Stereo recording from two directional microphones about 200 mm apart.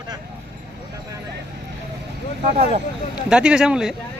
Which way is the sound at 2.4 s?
35° right (ahead or behind).